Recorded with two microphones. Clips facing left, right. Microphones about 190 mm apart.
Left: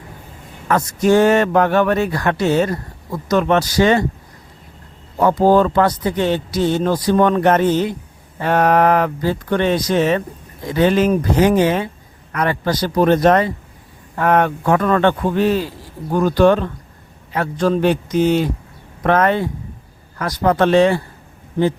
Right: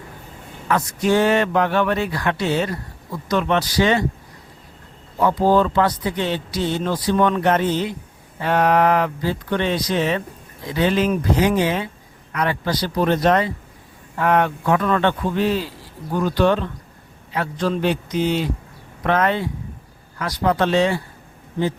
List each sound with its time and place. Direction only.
0.7 s speech: 45° left (ahead or behind)
5.2 s speech: 45° left (ahead or behind)